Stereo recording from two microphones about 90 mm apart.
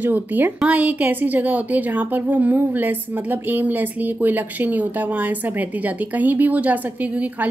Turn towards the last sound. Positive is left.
turn(degrees=-15)  # may be behind; listen again after turning